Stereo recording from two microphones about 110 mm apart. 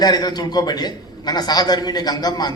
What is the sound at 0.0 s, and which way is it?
A man's voice, 40° left (ahead or behind).